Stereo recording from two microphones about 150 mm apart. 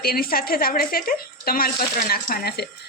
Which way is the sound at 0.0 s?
85° left.